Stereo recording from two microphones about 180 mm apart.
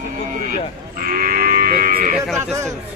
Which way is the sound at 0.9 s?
50° right (ahead or behind).